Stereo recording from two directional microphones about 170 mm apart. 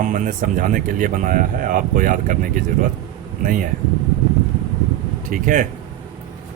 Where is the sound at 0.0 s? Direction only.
50° right (ahead or behind).